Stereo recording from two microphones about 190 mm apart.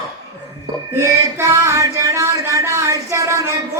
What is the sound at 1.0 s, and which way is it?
Speech, 15° right (ahead or behind).